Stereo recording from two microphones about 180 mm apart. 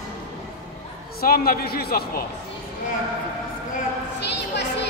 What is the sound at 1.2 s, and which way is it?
A man's voice, 55° left (ahead or behind).